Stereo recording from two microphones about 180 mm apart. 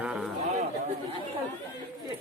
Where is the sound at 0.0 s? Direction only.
10° right (ahead or behind).